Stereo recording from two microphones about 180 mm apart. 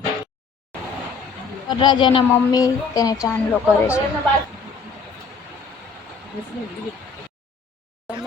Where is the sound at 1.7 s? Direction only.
25° left (ahead or behind).